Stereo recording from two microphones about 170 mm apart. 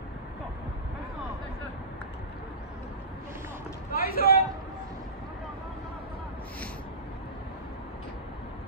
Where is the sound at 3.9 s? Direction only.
60° left (ahead or behind).